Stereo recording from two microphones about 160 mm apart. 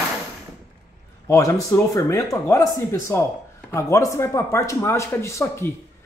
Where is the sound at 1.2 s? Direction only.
20° left (ahead or behind).